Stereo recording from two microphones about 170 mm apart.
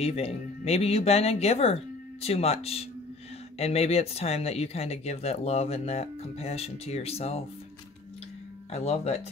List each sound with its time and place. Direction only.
0.0 s speech: 35° left (ahead or behind)
8.7 s speech: 40° left (ahead or behind)